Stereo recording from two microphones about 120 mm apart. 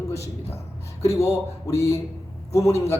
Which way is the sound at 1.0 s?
25° left (ahead or behind).